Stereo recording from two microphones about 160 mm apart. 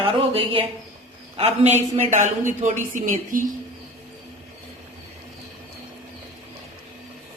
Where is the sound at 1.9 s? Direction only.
50° right (ahead or behind).